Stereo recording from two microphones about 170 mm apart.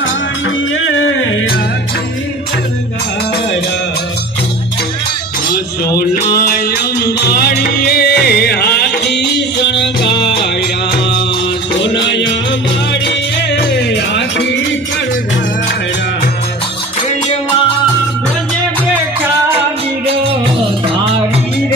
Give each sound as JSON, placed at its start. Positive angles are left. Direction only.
{"t": 5.5, "sound": "music", "side_deg": 60}
{"t": 7.2, "sound": "music", "side_deg": 65}
{"t": 11.8, "sound": "music", "side_deg": 90}